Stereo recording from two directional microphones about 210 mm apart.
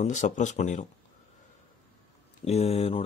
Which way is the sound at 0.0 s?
35° left (ahead or behind).